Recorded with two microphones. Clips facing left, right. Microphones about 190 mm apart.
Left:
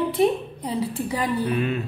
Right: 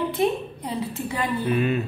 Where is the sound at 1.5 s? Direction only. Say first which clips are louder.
Right 2 dB; 5° right (ahead or behind).